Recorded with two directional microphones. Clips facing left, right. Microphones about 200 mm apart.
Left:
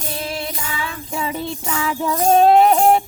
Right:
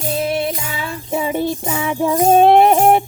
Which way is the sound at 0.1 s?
25° right (ahead or behind).